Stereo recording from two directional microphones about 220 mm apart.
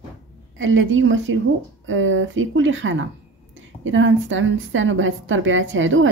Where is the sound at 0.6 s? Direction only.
60° right (ahead or behind).